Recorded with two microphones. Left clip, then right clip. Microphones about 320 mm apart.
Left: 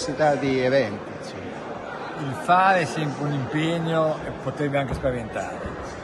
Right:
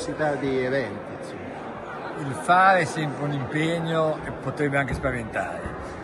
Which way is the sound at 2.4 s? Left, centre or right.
Centre.